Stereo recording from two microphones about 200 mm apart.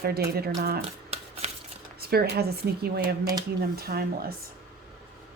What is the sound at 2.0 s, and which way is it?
Speech, 50° right (ahead or behind).